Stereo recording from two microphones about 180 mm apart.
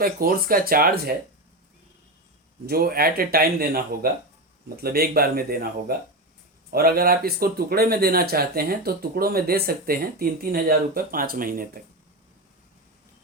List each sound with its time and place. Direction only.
0.0 s speech: 55° right (ahead or behind)
2.6 s speech: 55° right (ahead or behind)
6.7 s speech: 55° right (ahead or behind)